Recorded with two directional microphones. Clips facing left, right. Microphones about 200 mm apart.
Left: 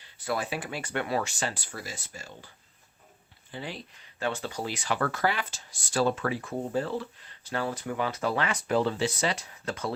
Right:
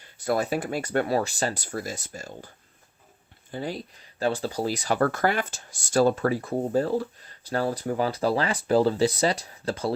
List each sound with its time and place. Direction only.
0.0 s speech: 40° right (ahead or behind)
3.5 s speech: 40° right (ahead or behind)